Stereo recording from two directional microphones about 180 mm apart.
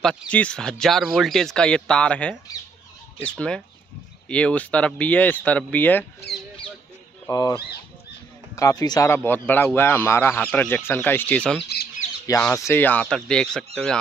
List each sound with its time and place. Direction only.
0.3 s speech: 5° left (ahead or behind)
7.2 s speech: 20° left (ahead or behind); by 13.7 s 5° left (ahead or behind)